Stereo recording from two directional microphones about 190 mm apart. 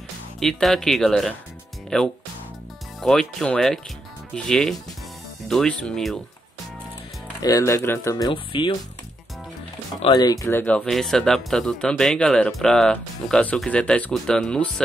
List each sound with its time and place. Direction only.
0.4 s speech: centre (ahead or behind)
7.4 s speech: 15° left (ahead or behind)
10.0 s speech: 20° left (ahead or behind); by 14.8 s 5° left (ahead or behind)